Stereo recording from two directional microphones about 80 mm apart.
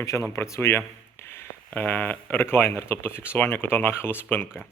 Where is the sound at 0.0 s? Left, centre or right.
Left.